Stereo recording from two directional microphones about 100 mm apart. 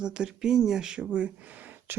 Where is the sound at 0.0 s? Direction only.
10° right (ahead or behind).